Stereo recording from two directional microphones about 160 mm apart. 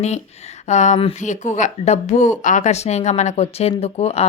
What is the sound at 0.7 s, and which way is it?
Speech, 45° left (ahead or behind).